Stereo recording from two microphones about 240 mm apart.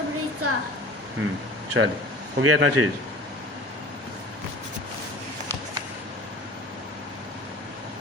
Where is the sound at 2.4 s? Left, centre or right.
Right.